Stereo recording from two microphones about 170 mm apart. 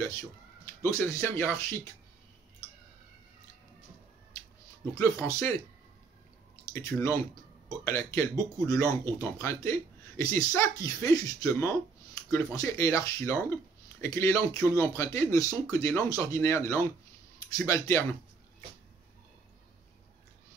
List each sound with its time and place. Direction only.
0.8 s speech: 15° left (ahead or behind)
4.9 s speech: 20° left (ahead or behind)
6.7 s speech: 15° left (ahead or behind)